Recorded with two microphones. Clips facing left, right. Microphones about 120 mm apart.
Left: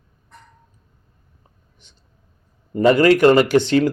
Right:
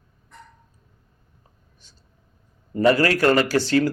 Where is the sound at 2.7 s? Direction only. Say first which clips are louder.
Left 5 dB; 20° left (ahead or behind).